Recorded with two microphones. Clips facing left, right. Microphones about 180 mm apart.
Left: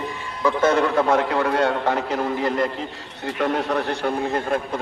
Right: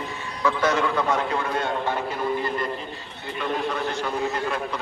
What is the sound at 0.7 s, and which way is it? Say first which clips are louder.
A man's voice: left 6 dB; 55° left (ahead or behind).